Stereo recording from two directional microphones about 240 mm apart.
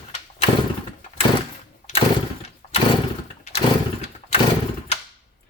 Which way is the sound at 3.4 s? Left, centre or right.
Left.